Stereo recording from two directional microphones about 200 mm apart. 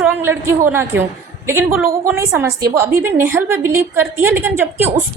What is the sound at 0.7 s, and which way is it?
A woman's voice, 10° right (ahead or behind).